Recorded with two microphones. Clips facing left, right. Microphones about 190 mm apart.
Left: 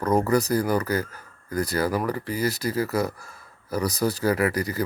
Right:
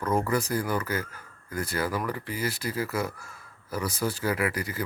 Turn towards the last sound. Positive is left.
turn(degrees=40)  # may be behind; listen again after turning